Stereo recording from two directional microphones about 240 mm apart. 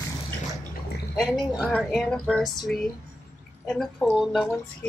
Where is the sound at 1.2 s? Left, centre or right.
Centre.